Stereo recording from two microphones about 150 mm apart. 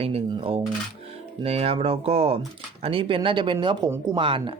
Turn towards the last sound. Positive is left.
turn(degrees=-35)  # may be behind; listen again after turning